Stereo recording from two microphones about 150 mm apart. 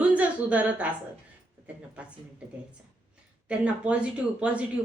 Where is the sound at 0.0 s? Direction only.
10° right (ahead or behind).